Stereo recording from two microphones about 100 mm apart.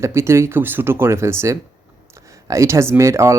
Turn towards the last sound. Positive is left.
turn(degrees=-30)  # may be behind; listen again after turning